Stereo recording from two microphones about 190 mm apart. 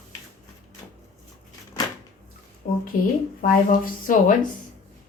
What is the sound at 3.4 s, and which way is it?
Speech, 50° left (ahead or behind).